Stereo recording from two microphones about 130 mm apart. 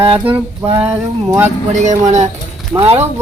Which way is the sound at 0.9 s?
25° right (ahead or behind).